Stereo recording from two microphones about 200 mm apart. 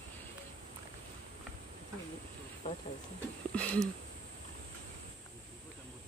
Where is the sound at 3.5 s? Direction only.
5° left (ahead or behind).